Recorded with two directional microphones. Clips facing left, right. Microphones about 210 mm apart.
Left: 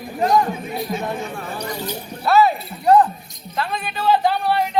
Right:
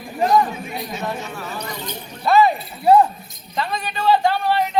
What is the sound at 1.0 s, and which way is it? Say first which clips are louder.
Speech: left 1 dB; 55° left (ahead or behind).